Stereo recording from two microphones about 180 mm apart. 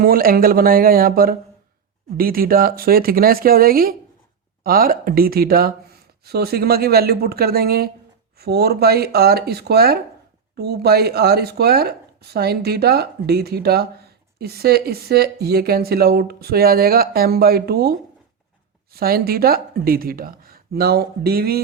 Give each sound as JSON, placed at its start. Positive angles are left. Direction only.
{"t": 0.0, "sound": "speech", "side_deg": -55}
{"t": 18.9, "sound": "speech", "side_deg": -55}